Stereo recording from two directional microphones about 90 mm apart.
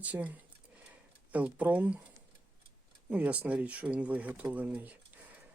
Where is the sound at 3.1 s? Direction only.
15° right (ahead or behind).